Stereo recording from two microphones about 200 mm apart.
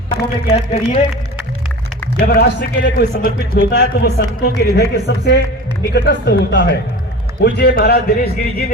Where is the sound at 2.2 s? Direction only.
50° left (ahead or behind).